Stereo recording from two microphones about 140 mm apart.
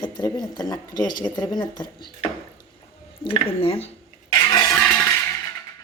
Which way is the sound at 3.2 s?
40° left (ahead or behind).